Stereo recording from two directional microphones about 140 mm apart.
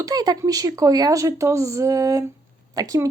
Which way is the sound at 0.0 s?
30° right (ahead or behind).